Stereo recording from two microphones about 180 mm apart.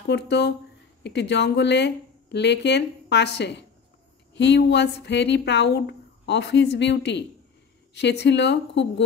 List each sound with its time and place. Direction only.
0.1 s speech: 70° left (ahead or behind)